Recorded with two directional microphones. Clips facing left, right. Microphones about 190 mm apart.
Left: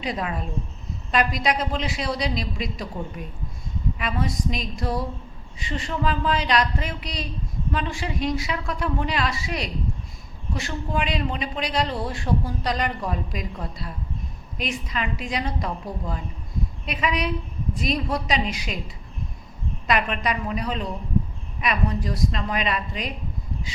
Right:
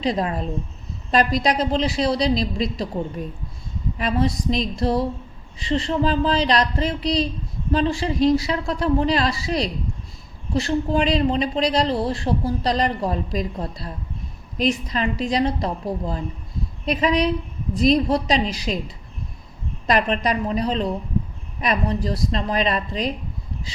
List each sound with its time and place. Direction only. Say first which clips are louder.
0.0 s a man's voice: right 6 dB; 35° right (ahead or behind)